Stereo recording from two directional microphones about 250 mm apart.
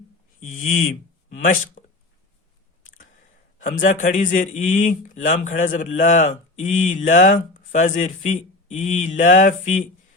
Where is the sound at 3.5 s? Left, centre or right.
Left.